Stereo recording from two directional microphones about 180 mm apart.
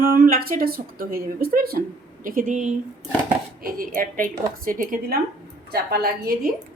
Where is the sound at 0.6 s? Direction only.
55° right (ahead or behind).